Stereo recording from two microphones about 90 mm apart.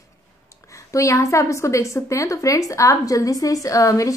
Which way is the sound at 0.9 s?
35° left (ahead or behind).